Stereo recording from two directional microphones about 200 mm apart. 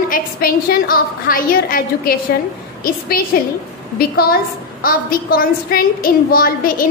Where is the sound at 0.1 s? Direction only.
45° left (ahead or behind).